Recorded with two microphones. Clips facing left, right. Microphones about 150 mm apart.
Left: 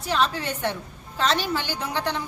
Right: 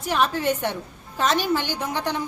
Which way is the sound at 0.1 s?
15° right (ahead or behind).